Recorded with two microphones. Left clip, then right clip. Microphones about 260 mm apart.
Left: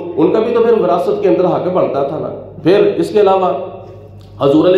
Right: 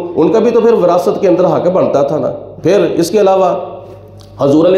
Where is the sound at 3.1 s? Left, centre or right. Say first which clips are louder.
Right 3 dB; right.